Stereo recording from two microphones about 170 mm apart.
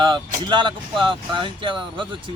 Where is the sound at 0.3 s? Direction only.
30° right (ahead or behind).